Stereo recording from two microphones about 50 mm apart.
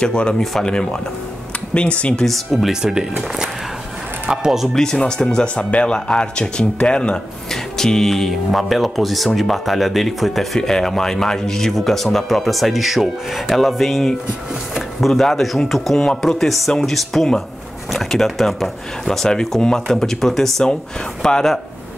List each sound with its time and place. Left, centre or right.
0.0 s speech: left
0.4 s speech: centre
0.7 s speech: centre
2.2 s speech: centre
4.4 s speech: centre
4.7 s speech: centre
7.7 s speech: centre